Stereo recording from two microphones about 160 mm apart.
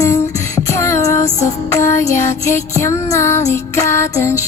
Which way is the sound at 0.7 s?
15° left (ahead or behind).